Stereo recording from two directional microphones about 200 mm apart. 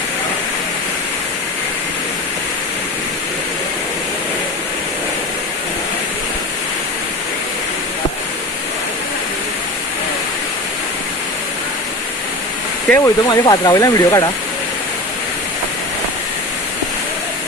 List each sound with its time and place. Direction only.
12.9 s speech: 20° left (ahead or behind)